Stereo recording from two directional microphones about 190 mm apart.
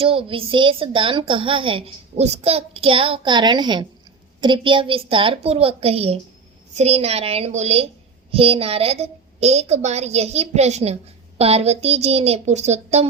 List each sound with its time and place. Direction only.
0.0 s a woman's voice: 30° right (ahead or behind)